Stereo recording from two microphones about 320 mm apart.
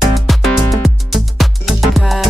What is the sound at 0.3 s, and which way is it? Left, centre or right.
Music, centre.